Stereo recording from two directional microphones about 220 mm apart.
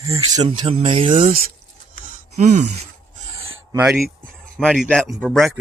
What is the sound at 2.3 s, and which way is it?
Gasp, 30° right (ahead or behind).